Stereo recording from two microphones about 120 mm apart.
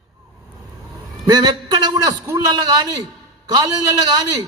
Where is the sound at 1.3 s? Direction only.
35° right (ahead or behind).